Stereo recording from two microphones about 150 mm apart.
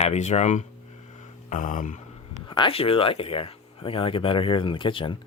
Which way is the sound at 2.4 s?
35° left (ahead or behind).